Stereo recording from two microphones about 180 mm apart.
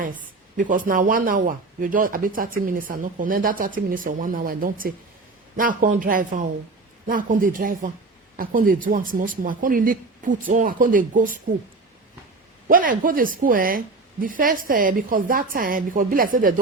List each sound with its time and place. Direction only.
0.0 s a woman's voice: 50° right (ahead or behind)
12.6 s a woman's voice: 50° right (ahead or behind)